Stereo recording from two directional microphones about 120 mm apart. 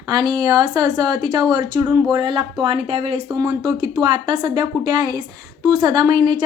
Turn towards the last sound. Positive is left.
turn(degrees=-35)  # may be behind; listen again after turning